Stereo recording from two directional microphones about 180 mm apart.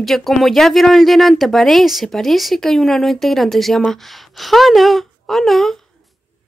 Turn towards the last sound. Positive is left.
turn(degrees=0)  # may be behind; listen again after turning